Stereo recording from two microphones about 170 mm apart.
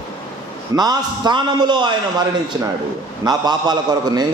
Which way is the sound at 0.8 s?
25° right (ahead or behind).